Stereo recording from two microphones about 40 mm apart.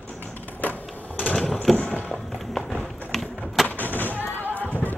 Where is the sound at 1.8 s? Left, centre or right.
Left.